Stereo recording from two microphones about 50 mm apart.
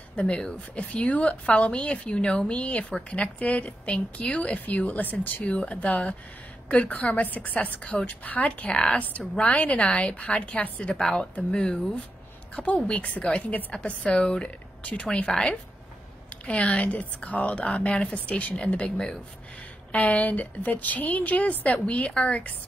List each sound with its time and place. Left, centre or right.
0.1 s a woman's voice: left
11.0 s a woman's voice: centre